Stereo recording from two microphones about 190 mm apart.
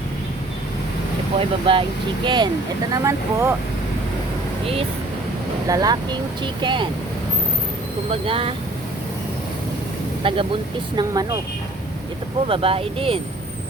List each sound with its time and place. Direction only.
1.4 s speech: 30° right (ahead or behind)
4.6 s speech: 30° right (ahead or behind)
5.6 s speech: 20° right (ahead or behind)
8.1 s speech: 30° right (ahead or behind)
10.2 s speech: 25° right (ahead or behind)
12.5 s speech: 30° right (ahead or behind)